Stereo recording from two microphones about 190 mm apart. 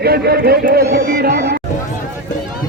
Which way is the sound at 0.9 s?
55° right (ahead or behind).